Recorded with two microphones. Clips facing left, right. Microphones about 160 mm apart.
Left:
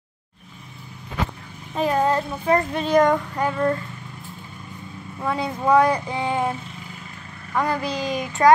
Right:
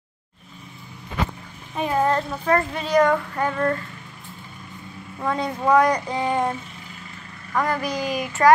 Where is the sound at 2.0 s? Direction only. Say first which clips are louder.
Left 1 dB; 15° left (ahead or behind).